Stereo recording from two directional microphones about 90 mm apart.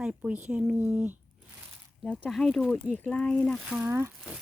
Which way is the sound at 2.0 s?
Centre (ahead or behind).